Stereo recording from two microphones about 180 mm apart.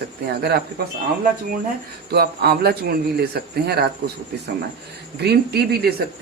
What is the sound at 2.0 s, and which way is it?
Speech, 60° right (ahead or behind).